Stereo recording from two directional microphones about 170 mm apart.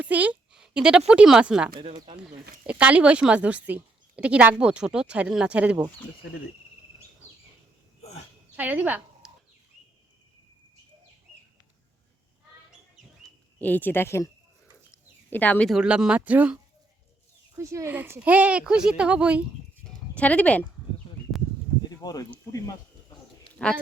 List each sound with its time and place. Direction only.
0.0 s a woman's voice: 10° right (ahead or behind)
8.5 s speech: 10° right (ahead or behind)
13.6 s speech: 10° left (ahead or behind)
15.3 s speech: 10° left (ahead or behind); by 16.6 s 10° right (ahead or behind)
17.6 s a woman's voice: 15° right (ahead or behind)
19.8 s a sound: 10° left (ahead or behind)
21.8 s a sound: 20° left (ahead or behind)